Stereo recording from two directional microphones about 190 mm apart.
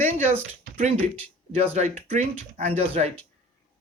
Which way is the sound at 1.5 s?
35° right (ahead or behind).